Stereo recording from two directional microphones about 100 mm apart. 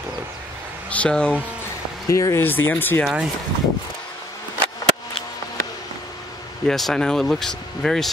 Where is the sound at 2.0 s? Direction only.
30° left (ahead or behind).